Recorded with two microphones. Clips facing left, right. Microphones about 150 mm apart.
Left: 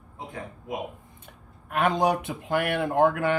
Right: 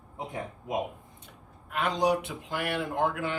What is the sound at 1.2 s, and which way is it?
Speech, 55° left (ahead or behind).